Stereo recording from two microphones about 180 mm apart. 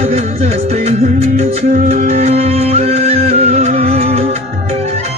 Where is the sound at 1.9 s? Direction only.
35° right (ahead or behind).